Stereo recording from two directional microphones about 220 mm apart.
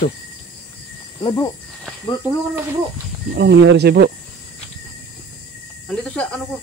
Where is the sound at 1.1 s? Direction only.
20° left (ahead or behind).